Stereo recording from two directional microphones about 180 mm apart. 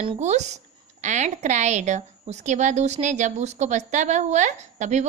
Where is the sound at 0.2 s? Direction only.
40° right (ahead or behind).